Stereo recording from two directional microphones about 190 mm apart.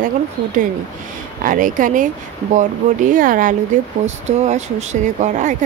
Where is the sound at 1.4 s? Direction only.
45° right (ahead or behind).